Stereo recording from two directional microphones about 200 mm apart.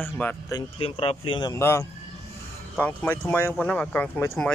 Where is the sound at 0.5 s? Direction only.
30° left (ahead or behind).